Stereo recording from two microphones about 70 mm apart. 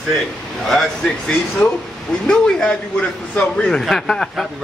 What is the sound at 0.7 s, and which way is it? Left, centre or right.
Speech, centre.